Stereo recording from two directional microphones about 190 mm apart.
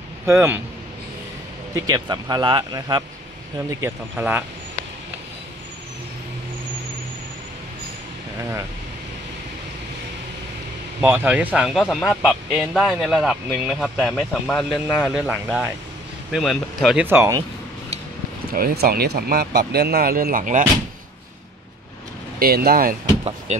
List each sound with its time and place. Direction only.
0.3 s speech: 15° right (ahead or behind)
1.8 s speech: 20° right (ahead or behind)
3.8 s speech: 10° right (ahead or behind)
11.0 s speech: 10° right (ahead or behind)
18.5 s speech: 50° right (ahead or behind)
22.4 s speech: 55° right (ahead or behind)